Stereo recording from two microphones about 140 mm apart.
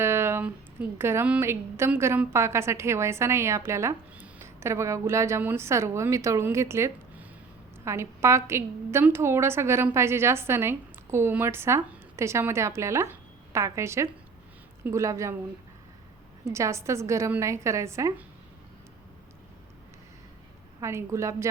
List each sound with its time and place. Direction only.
0.0 s speech: 20° right (ahead or behind)
16.5 s speech: 20° right (ahead or behind)
20.8 s speech: 20° right (ahead or behind)